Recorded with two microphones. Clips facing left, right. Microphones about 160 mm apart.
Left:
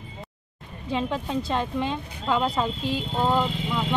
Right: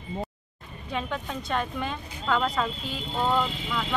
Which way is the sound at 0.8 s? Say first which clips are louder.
Left 4 dB; 30° left (ahead or behind).